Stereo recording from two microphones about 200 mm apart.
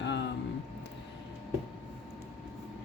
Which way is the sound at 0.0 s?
60° left (ahead or behind).